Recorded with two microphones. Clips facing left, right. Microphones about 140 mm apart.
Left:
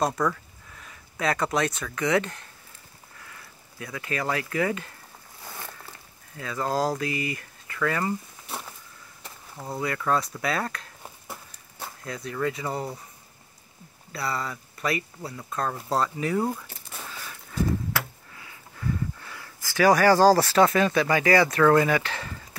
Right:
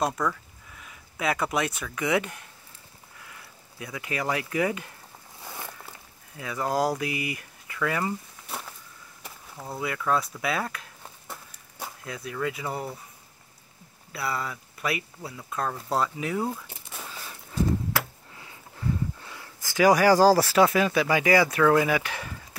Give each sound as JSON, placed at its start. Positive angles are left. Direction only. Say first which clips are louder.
{"t": 0.0, "sound": "speech", "louder": "left 2 dB", "side_deg": 0}
{"t": 3.8, "sound": "speech", "louder": "left 1 dB", "side_deg": -15}
{"t": 5.6, "sound": "a sound", "louder": "right 1 dB", "side_deg": -10}
{"t": 6.3, "sound": "speech", "louder": "even", "side_deg": -15}
{"t": 9.6, "sound": "speech", "louder": "left 2 dB", "side_deg": -5}
{"t": 14.1, "sound": "speech", "louder": "left 1 dB", "side_deg": -5}
{"t": 16.9, "sound": "a sound", "louder": "left 1 dB", "side_deg": -5}
{"t": 17.2, "sound": "a sound", "louder": "left 1 dB", "side_deg": -20}
{"t": 19.1, "sound": "speech", "louder": "even", "side_deg": -20}